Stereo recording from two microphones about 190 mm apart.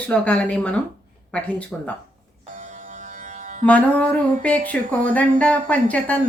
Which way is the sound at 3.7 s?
5° left (ahead or behind).